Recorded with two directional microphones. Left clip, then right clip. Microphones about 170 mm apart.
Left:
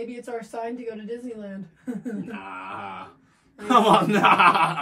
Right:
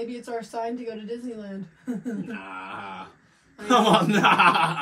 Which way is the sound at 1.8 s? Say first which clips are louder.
Even; centre (ahead or behind).